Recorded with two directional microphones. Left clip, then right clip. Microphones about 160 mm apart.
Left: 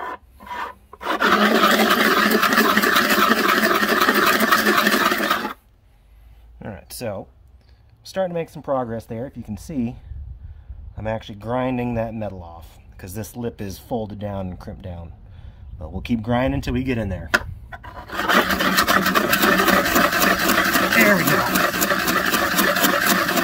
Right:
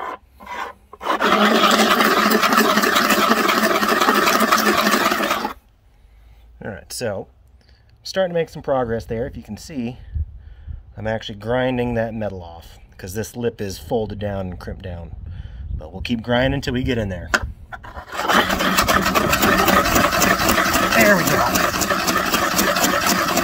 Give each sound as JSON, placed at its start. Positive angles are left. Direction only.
{"t": 0.0, "sound": "filing", "side_deg": 0}
{"t": 2.9, "sound": "a sound", "side_deg": 0}
{"t": 6.6, "sound": "a sound", "side_deg": -30}
{"t": 8.0, "sound": "speech", "side_deg": -35}
{"t": 11.0, "sound": "speech", "side_deg": -35}
{"t": 17.3, "sound": "filing", "side_deg": -5}